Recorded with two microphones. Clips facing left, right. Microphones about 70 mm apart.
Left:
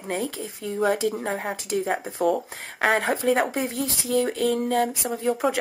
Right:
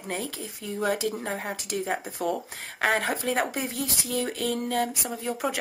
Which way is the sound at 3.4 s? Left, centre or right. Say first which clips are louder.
Left 4 dB; left.